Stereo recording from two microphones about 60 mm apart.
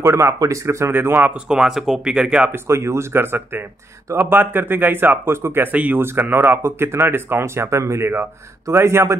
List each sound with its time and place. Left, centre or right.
0.0 s speech: right
0.9 s speech: right
1.3 s speech: centre
2.5 s speech: right
5.7 s speech: right
6.0 s speech: right